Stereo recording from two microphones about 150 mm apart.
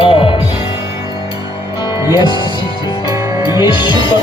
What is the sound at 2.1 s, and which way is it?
Music, 30° left (ahead or behind).